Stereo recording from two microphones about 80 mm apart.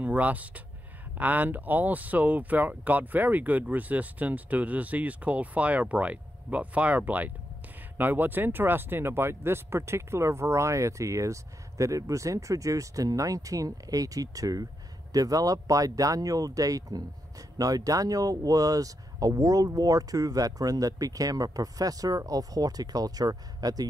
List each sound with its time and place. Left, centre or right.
0.0 s speech: centre; by 23.9 s right